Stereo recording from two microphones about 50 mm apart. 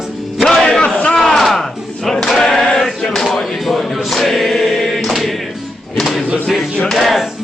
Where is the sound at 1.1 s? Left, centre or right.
Centre.